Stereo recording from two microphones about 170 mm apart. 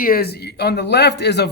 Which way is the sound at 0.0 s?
60° left (ahead or behind).